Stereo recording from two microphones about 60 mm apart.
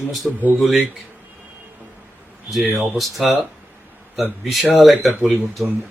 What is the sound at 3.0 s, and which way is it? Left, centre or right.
Speech, centre.